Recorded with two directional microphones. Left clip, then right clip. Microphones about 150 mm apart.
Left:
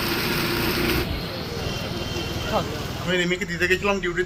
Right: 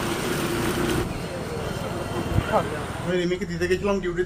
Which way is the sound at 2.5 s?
30° right (ahead or behind).